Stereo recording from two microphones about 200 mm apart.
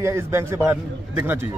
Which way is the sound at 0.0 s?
10° right (ahead or behind).